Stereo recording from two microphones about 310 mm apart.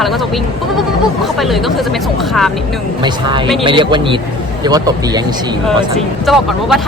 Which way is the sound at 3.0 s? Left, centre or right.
Centre.